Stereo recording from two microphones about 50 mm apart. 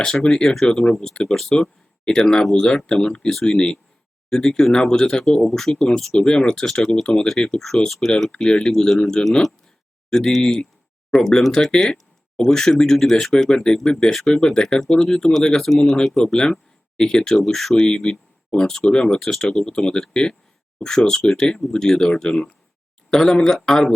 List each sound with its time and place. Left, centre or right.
0.0 s speech: centre
15.8 s speech: centre
17.7 s speech: centre